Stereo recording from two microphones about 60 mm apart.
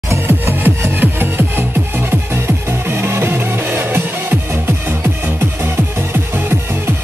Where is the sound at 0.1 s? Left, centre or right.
Right.